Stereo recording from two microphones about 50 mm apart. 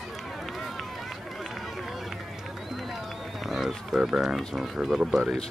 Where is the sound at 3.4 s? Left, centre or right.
Centre.